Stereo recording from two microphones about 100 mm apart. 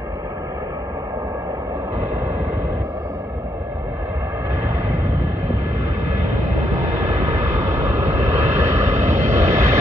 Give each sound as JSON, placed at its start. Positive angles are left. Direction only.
{"t": 7.7, "sound": "vehicle", "side_deg": -25}